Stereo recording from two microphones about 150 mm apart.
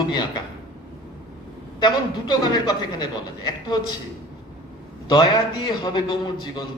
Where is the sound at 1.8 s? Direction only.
30° left (ahead or behind).